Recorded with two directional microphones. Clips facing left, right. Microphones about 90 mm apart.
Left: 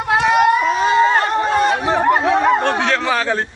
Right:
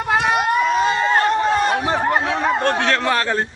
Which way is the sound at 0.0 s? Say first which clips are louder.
Left 4 dB; centre (ahead or behind).